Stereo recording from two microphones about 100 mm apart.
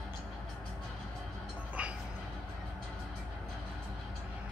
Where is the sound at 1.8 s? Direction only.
10° right (ahead or behind).